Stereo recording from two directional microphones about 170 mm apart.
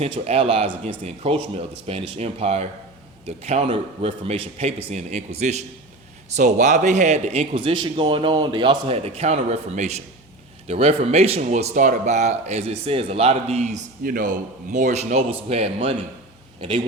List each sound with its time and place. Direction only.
0.0 s a man's voice: 35° right (ahead or behind)